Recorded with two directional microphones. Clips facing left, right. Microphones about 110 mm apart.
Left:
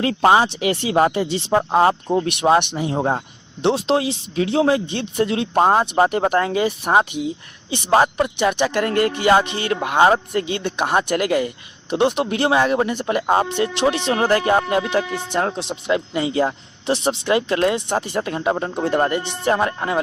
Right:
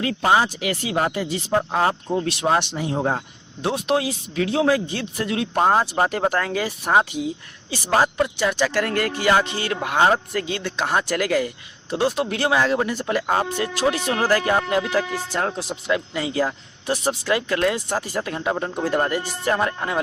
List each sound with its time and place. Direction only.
0.3 s speech: 25° left (ahead or behind)